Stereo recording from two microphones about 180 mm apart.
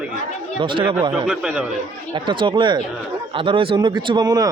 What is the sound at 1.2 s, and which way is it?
Speech, 5° right (ahead or behind).